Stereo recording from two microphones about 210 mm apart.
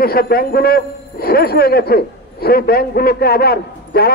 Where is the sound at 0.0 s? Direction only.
45° left (ahead or behind).